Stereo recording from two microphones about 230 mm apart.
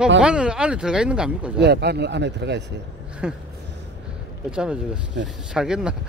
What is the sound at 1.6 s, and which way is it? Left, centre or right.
Speech, right.